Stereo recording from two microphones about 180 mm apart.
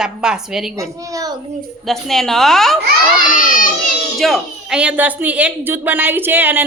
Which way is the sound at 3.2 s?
50° left (ahead or behind).